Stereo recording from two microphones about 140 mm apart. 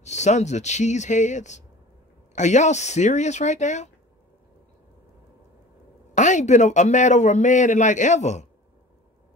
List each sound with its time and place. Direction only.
0.0 s a man's voice: 55° left (ahead or behind)
6.1 s a man's voice: 60° left (ahead or behind)